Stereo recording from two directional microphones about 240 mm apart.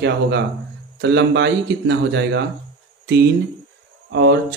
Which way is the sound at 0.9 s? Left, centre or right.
Right.